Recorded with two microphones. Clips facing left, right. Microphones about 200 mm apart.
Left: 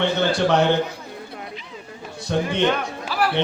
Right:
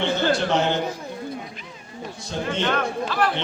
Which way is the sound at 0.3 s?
65° left (ahead or behind).